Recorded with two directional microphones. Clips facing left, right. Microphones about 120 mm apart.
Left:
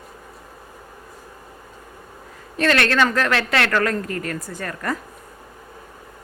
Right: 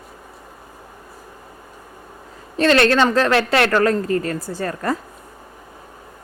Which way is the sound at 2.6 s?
30° right (ahead or behind).